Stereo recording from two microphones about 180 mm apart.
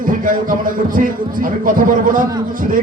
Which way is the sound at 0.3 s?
50° right (ahead or behind).